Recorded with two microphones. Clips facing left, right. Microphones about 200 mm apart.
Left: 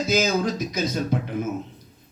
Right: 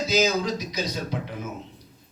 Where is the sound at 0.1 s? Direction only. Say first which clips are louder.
Left 1 dB; 50° left (ahead or behind).